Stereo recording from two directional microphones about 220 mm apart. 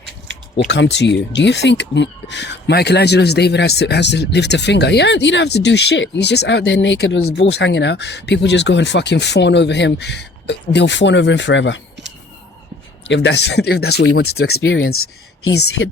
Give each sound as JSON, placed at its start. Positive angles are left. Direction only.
{"t": 0.7, "sound": "speech", "side_deg": 50}
{"t": 13.1, "sound": "speech", "side_deg": 55}
{"t": 14.6, "sound": "speech", "side_deg": 65}